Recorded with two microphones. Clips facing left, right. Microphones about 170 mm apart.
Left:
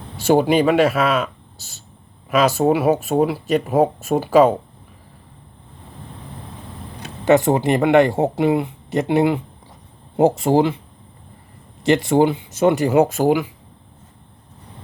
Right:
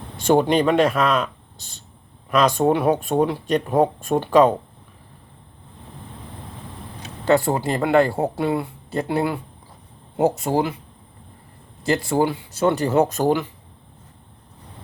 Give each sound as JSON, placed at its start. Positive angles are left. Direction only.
{"t": 0.2, "sound": "speech", "side_deg": 5}
{"t": 7.3, "sound": "speech", "side_deg": 20}
{"t": 10.4, "sound": "speech", "side_deg": 25}
{"t": 11.9, "sound": "speech", "side_deg": 25}